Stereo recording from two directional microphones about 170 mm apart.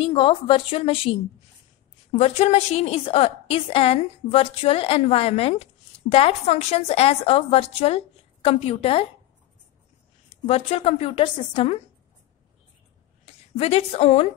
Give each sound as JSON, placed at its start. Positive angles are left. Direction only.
{"t": 0.0, "sound": "a woman's voice", "side_deg": 30}
{"t": 2.1, "sound": "a woman's voice", "side_deg": 40}
{"t": 10.3, "sound": "a woman's voice", "side_deg": 35}
{"t": 13.2, "sound": "a woman's voice", "side_deg": 35}